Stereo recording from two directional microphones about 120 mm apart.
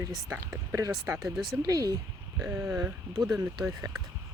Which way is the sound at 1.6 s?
30° right (ahead or behind).